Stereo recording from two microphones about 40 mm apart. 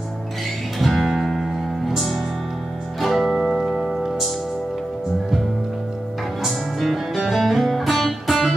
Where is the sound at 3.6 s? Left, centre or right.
Centre.